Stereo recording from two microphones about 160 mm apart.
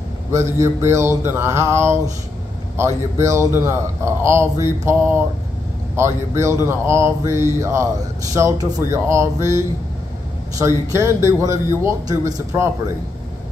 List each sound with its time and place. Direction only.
0.3 s speech: 20° right (ahead or behind)